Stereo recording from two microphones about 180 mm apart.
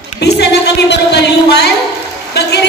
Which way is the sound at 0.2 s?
70° left (ahead or behind).